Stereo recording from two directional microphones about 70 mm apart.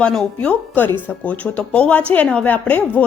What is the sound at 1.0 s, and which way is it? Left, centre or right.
A woman's voice, centre.